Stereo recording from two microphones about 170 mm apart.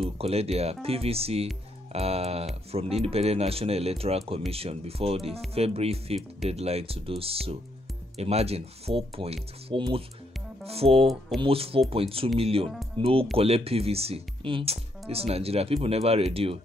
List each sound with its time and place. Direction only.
0.2 s speech: 35° right (ahead or behind)